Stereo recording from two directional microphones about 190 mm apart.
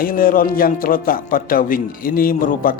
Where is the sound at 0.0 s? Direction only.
50° left (ahead or behind).